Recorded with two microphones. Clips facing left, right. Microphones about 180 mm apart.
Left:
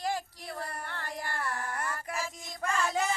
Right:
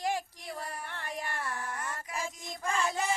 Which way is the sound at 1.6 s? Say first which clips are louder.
Left 2 dB; 60° left (ahead or behind).